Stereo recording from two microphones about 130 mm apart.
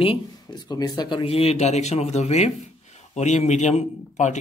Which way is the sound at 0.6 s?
30° left (ahead or behind).